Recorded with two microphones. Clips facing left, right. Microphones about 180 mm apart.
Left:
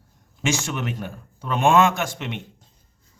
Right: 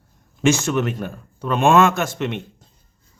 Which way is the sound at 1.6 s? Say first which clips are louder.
Right 2 dB; 15° left (ahead or behind).